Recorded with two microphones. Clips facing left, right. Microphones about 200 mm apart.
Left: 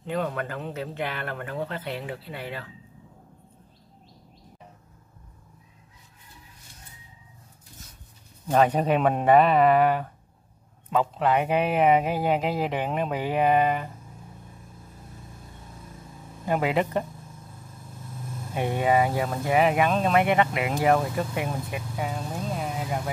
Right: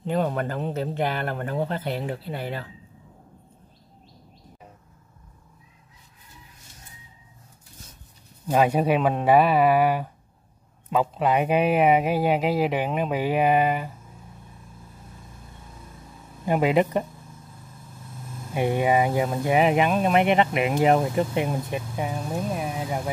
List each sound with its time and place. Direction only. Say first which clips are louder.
0.1 s speech: right 4 dB; 35° right (ahead or behind)
8.5 s speech: right 1 dB; 10° right (ahead or behind)
16.4 s speech: right 4 dB; 15° right (ahead or behind)
18.5 s speech: right 2 dB; 15° right (ahead or behind)